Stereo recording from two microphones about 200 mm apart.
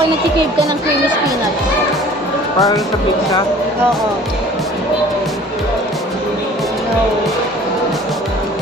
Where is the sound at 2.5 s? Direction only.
15° left (ahead or behind).